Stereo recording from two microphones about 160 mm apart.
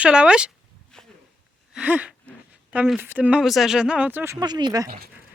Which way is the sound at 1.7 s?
5° right (ahead or behind).